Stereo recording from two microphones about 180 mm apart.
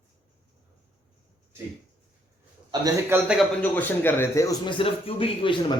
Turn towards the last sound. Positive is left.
turn(degrees=30)  # may be behind; listen again after turning